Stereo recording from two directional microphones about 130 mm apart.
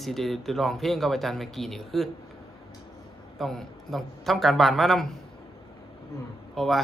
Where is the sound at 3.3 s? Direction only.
Centre (ahead or behind).